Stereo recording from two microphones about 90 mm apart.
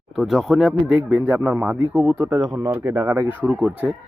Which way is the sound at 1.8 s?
25° right (ahead or behind).